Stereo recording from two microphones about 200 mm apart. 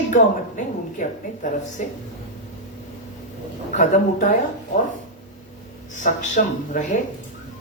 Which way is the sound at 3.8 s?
40° left (ahead or behind).